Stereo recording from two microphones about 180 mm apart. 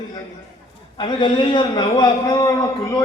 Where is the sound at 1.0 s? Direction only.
25° left (ahead or behind).